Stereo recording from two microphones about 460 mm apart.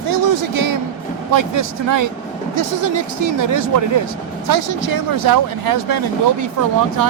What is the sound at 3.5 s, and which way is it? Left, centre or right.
Speech, right.